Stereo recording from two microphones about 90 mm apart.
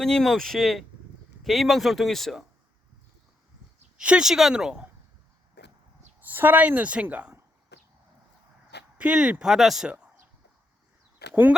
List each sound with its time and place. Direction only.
0.0 s speech: 5° left (ahead or behind)
3.9 s speech: 10° right (ahead or behind)
6.1 s a woman's voice: 20° right (ahead or behind)
9.0 s speech: 10° right (ahead or behind)